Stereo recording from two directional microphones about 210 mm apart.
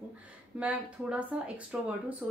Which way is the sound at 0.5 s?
5° right (ahead or behind).